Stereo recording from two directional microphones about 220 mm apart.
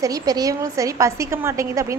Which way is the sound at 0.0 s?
15° right (ahead or behind).